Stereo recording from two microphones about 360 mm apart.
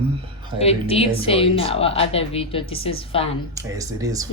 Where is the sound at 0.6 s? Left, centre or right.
Centre.